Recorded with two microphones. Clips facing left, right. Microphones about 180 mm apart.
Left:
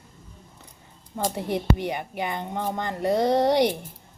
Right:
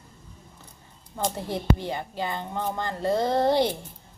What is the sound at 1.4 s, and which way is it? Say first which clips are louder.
A woman's voice: left 3 dB; 20° left (ahead or behind).